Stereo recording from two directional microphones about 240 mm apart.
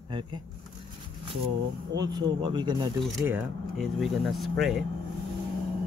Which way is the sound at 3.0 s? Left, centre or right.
Centre.